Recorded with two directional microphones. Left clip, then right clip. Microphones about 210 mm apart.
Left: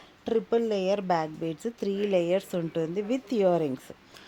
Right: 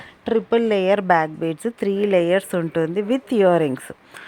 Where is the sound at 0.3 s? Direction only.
20° right (ahead or behind).